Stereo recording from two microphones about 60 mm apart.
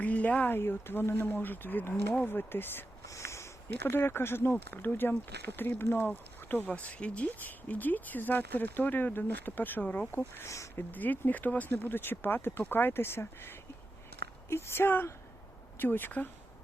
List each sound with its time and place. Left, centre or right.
0.0 s speech: left
3.1 s speech: left
10.3 s speech: left
10.8 s speech: left